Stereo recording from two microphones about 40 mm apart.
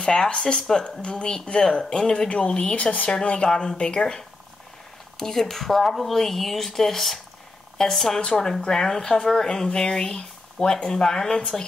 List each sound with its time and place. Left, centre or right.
0.0 s speech: left
3.4 s speech: left
5.2 s a woman's voice: centre